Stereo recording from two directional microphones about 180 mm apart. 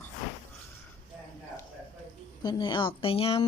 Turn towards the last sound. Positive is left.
turn(degrees=30)  # may be behind; listen again after turning